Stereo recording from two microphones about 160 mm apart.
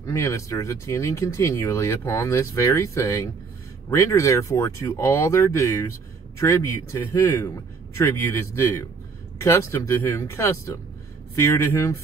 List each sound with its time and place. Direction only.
0.0 s speech: 20° left (ahead or behind)